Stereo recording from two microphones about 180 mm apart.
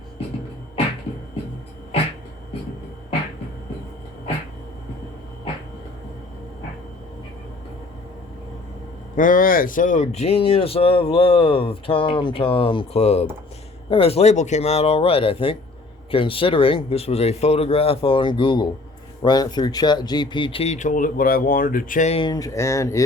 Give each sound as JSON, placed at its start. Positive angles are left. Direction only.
{"t": 9.1, "sound": "speech", "side_deg": 50}
{"t": 22.2, "sound": "speech", "side_deg": 20}